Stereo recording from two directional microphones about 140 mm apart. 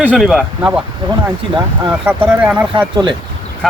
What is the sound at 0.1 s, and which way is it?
Speech, centre (ahead or behind).